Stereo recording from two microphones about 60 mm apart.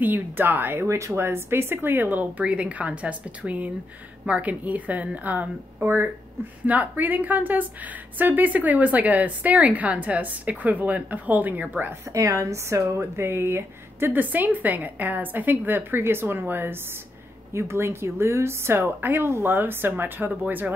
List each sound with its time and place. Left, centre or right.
0.0 s speech: right
0.8 s a woman's voice: right
12.1 s a woman's voice: right
14.1 s a woman's voice: right